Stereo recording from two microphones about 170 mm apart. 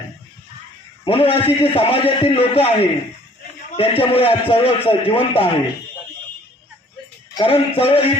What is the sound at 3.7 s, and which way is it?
A man's voice, 35° left (ahead or behind).